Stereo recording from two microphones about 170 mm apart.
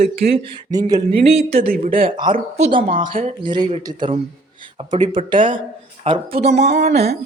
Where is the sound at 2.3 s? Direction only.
40° right (ahead or behind).